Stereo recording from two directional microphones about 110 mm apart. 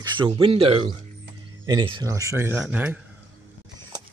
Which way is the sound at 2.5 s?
15° right (ahead or behind).